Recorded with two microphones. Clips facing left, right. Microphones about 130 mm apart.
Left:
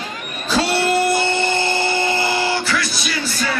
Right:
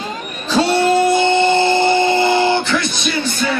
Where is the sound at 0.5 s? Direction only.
15° right (ahead or behind).